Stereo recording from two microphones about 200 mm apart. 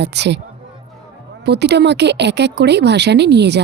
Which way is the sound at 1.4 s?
55° right (ahead or behind).